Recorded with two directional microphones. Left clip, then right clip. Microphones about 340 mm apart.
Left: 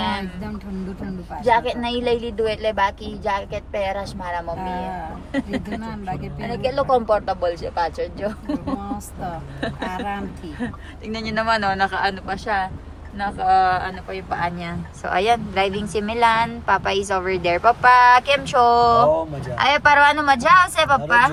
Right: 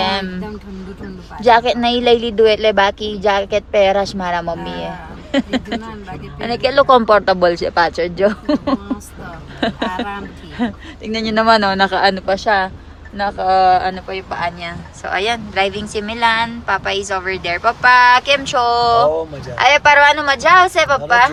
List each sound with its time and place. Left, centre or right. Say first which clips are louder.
0.0 s a sound: right 7 dB; centre
1.5 s speech: right 7 dB; centre
10.6 s speech: right 10 dB; centre